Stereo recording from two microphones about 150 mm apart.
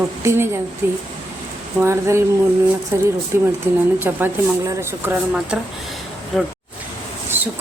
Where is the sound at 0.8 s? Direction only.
15° right (ahead or behind).